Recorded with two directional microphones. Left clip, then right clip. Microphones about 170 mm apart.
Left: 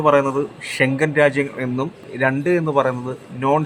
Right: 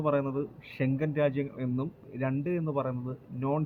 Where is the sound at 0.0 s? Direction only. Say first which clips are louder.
Left 14 dB; 10° left (ahead or behind).